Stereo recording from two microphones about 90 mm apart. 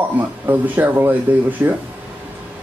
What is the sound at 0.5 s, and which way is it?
Speech, 20° right (ahead or behind).